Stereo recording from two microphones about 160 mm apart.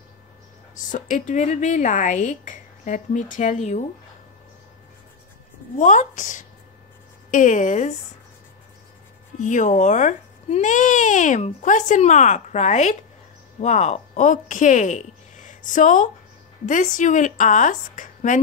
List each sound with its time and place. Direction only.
0.9 s speech: 55° left (ahead or behind)
5.8 s speech: 50° left (ahead or behind)
9.4 s speech: 50° left (ahead or behind)